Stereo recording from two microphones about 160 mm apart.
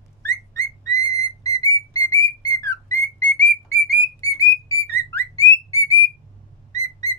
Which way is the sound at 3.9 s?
20° left (ahead or behind).